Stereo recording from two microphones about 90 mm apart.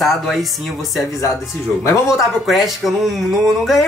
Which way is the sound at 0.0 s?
Centre (ahead or behind).